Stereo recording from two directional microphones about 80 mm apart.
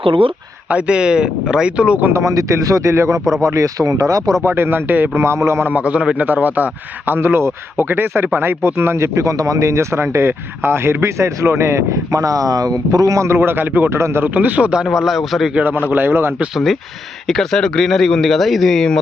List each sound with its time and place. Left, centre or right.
0.1 s speech: right
0.7 s speech: centre
2.0 s a man's voice: right
4.4 s a man's voice: right
5.6 s a man's voice: centre; by 13.3 s right
13.3 s a man's voice: right; by 15.5 s centre
15.5 s a man's voice: centre
17.2 s speech: centre